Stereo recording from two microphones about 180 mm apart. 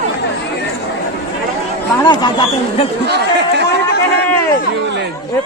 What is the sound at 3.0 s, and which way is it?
Chatter, 65° right (ahead or behind).